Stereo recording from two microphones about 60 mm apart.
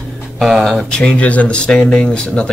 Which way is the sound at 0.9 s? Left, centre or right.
Centre.